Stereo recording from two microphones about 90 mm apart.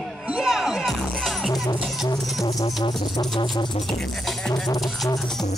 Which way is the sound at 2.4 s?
45° left (ahead or behind).